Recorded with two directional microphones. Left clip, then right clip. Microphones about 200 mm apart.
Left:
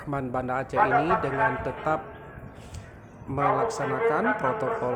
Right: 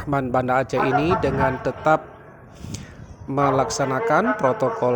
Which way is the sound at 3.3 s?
30° right (ahead or behind).